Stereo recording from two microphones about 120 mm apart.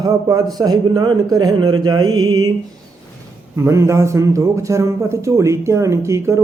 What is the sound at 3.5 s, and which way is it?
A man's voice, 25° right (ahead or behind).